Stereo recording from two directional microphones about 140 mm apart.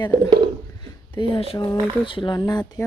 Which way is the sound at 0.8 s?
35° left (ahead or behind).